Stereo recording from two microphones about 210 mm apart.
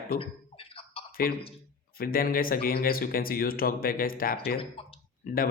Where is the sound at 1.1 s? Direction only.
45° left (ahead or behind).